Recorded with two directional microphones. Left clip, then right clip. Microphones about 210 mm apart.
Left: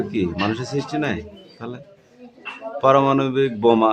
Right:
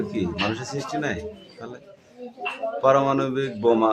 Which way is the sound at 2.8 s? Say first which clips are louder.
Left 4 dB; 25° left (ahead or behind).